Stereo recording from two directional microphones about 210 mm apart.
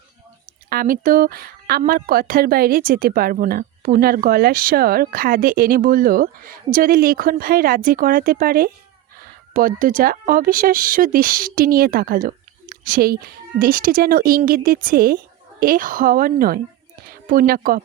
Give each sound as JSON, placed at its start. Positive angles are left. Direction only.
{"t": 0.7, "sound": "a woman's voice", "side_deg": -45}